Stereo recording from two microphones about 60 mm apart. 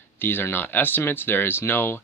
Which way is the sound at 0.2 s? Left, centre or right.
Left.